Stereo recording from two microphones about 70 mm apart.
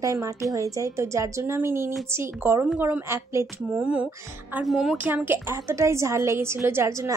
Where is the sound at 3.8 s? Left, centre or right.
Centre.